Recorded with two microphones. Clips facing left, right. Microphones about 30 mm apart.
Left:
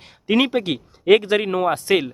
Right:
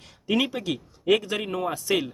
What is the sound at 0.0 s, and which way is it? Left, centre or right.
Speech, left.